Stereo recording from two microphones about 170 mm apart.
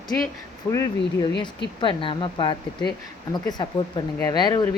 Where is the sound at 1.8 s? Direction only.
30° left (ahead or behind).